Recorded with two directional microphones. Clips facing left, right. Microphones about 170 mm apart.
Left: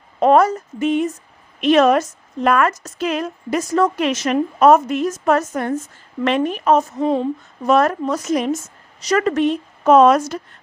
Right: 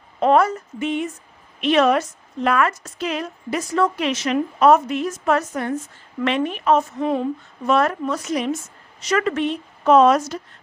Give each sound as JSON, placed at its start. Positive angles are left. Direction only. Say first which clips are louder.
{"t": 0.2, "sound": "a woman's voice", "louder": "left 3 dB", "side_deg": 45}
{"t": 7.0, "sound": "speech", "louder": "left 3 dB", "side_deg": 25}
{"t": 7.6, "sound": "a woman's voice", "louder": "left 3 dB", "side_deg": 40}